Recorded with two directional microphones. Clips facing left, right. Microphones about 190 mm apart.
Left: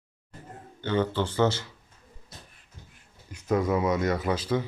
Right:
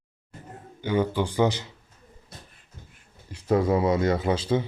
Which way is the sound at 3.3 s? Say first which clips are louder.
Right 3 dB; 30° right (ahead or behind).